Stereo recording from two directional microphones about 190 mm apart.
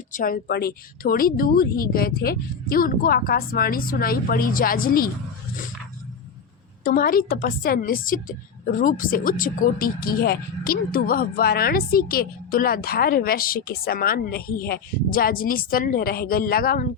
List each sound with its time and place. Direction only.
0.1 s a woman's voice: 45° left (ahead or behind)
6.8 s a woman's voice: 50° left (ahead or behind)